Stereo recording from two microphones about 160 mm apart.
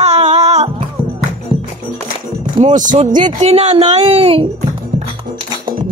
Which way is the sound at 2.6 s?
50° right (ahead or behind).